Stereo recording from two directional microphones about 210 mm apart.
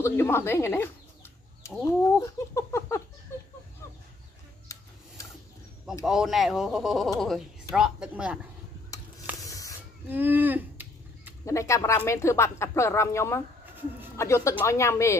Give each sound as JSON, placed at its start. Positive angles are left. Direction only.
{"t": 0.0, "sound": "chicken", "side_deg": 10}
{"t": 2.1, "sound": "speech", "side_deg": 15}
{"t": 6.0, "sound": "speech", "side_deg": 0}
{"t": 8.9, "sound": "a sound", "side_deg": 15}
{"t": 9.4, "sound": "snake", "side_deg": 15}
{"t": 10.0, "sound": "a sound", "side_deg": -10}
{"t": 11.4, "sound": "speech", "side_deg": 15}
{"t": 13.7, "sound": "a sound", "side_deg": -10}
{"t": 14.1, "sound": "speech", "side_deg": 15}